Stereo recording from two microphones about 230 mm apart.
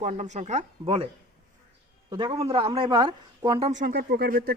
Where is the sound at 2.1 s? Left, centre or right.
Centre; by 4.6 s right.